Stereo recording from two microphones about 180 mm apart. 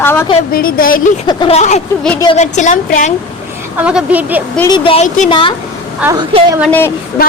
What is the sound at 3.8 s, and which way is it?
Speech, 5° right (ahead or behind).